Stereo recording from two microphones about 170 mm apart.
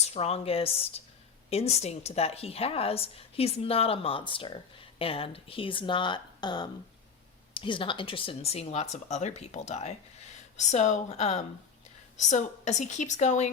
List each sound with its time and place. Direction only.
0.0 s a woman's voice: 40° left (ahead or behind)